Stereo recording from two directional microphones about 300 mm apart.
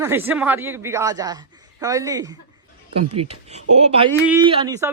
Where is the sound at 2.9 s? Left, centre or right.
Right.